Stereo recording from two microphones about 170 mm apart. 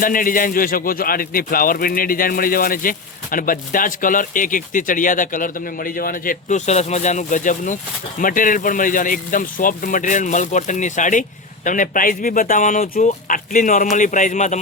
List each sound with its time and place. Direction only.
0.0 s speech: 55° left (ahead or behind)